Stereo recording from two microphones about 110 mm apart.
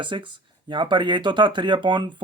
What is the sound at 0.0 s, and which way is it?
Speech, 45° right (ahead or behind).